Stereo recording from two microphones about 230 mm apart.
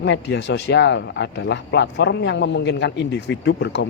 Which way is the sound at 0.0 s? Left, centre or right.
Left.